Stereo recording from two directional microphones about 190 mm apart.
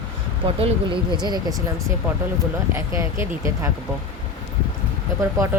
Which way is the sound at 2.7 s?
15° right (ahead or behind).